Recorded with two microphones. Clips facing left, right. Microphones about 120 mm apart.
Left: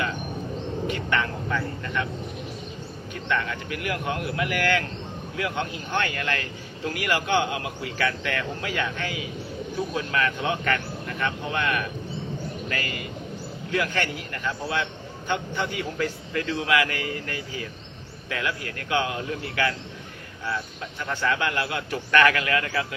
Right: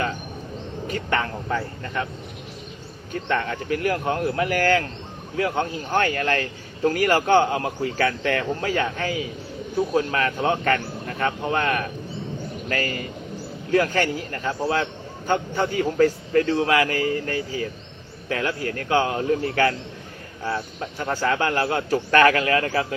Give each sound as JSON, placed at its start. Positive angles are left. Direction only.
{"t": 0.9, "sound": "a man's voice", "side_deg": -40}
{"t": 3.1, "sound": "a man's voice", "side_deg": -40}
{"t": 21.0, "sound": "a man's voice", "side_deg": -35}